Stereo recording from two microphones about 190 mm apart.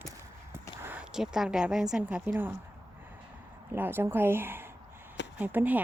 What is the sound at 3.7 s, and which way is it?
Speech, 10° right (ahead or behind).